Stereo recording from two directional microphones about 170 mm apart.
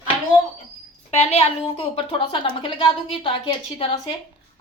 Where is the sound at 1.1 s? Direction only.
40° left (ahead or behind).